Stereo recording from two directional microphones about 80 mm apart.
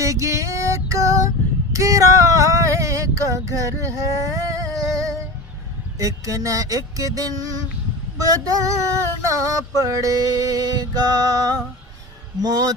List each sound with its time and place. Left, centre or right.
0.0 s music: right
1.7 s a sound: right
6.0 s music: right